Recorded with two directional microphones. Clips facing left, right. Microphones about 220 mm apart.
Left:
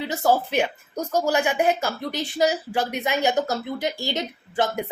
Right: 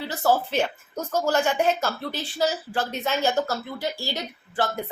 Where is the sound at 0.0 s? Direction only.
20° left (ahead or behind).